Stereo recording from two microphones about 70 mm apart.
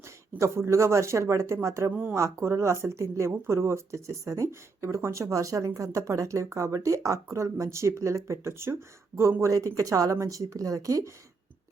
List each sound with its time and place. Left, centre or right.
0.3 s speech: right
1.9 s speech: right
2.1 s speech: right
9.4 s speech: right